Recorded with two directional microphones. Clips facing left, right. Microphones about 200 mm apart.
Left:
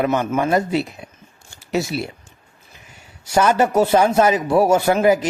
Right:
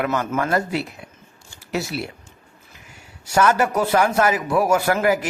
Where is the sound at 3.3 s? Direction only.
20° left (ahead or behind).